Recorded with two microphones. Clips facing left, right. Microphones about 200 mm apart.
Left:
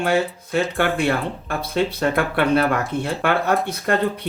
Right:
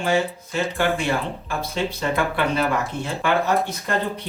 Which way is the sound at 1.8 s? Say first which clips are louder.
Left 2 dB; 60° left (ahead or behind).